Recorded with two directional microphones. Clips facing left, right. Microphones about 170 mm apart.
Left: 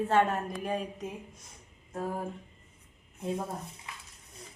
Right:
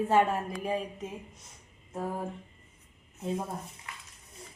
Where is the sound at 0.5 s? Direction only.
5° right (ahead or behind).